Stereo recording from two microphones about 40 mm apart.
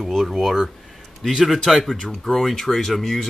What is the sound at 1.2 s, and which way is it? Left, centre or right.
Speech, centre.